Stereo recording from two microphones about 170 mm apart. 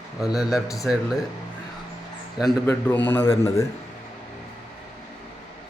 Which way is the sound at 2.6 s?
10° left (ahead or behind).